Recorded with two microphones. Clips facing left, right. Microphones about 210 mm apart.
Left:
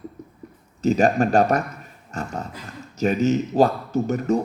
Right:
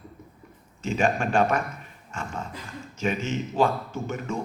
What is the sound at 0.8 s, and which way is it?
Speech, 40° left (ahead or behind).